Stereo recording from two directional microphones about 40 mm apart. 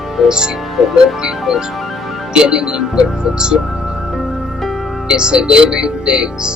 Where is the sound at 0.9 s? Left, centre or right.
Centre.